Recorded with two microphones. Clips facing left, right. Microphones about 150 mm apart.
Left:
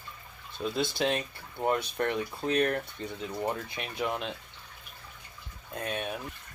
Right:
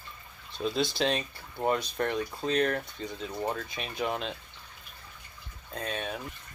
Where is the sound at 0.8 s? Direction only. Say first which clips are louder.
Even; 20° left (ahead or behind).